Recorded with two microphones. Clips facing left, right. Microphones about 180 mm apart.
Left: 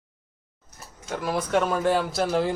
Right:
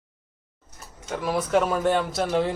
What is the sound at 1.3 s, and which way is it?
Speech, centre (ahead or behind).